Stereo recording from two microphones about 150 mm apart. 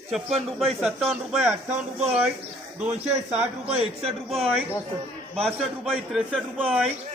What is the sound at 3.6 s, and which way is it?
Speech, 40° right (ahead or behind).